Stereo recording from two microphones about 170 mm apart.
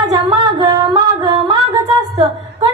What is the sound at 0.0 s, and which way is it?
Singing, 25° right (ahead or behind).